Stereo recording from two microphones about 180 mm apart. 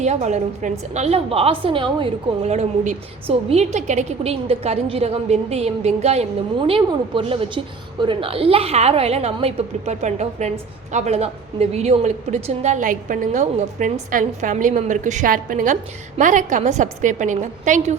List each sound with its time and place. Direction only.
0.0 s a woman's voice: 40° right (ahead or behind)